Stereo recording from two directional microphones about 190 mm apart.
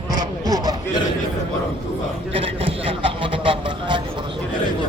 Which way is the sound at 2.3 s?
30° right (ahead or behind).